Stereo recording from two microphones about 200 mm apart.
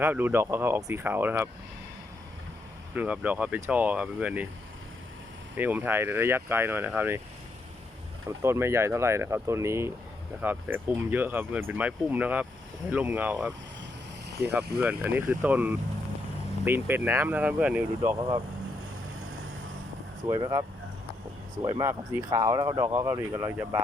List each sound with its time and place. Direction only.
0.0 s speech: 10° right (ahead or behind)
2.9 s speech: 10° right (ahead or behind)
5.5 s speech: 10° right (ahead or behind)
8.4 s speech: 10° right (ahead or behind)
20.2 s speech: 20° right (ahead or behind)